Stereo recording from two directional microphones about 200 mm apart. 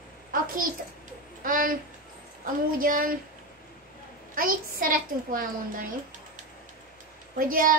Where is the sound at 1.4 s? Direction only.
45° right (ahead or behind).